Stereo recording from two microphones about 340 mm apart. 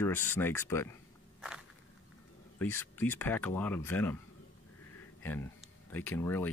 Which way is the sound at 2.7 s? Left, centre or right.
Centre.